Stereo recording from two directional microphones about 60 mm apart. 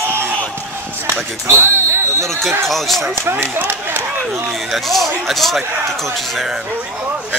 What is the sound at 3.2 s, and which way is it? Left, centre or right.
Speech, right.